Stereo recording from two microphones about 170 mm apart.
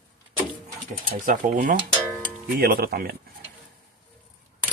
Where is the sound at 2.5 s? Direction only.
65° right (ahead or behind).